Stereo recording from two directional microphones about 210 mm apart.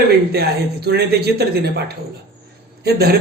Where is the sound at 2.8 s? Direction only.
50° right (ahead or behind).